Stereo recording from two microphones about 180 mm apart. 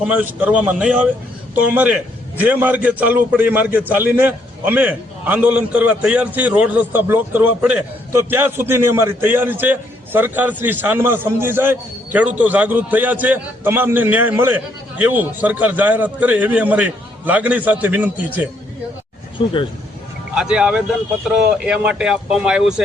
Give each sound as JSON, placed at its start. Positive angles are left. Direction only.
{"t": 0.1, "sound": "a man's voice", "side_deg": -10}
{"t": 19.4, "sound": "speech", "side_deg": 30}
{"t": 20.3, "sound": "speech", "side_deg": -5}